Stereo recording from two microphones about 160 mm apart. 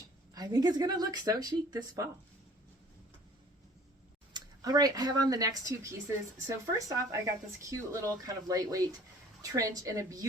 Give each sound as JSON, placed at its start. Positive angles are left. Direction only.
{"t": 0.3, "sound": "speech", "side_deg": -25}
{"t": 4.4, "sound": "speech", "side_deg": -25}